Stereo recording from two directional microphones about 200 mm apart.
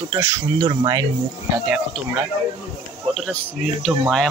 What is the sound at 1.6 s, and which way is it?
Speech, 5° right (ahead or behind).